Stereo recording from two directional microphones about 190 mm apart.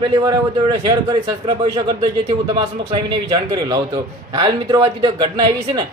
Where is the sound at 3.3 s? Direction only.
20° right (ahead or behind).